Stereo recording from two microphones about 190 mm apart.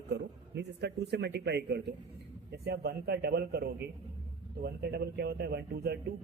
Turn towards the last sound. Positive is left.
turn(degrees=-55)  # may be behind; listen again after turning